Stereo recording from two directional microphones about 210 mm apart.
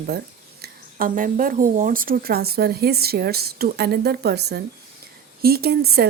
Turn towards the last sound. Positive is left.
turn(degrees=-50)  # may be behind; listen again after turning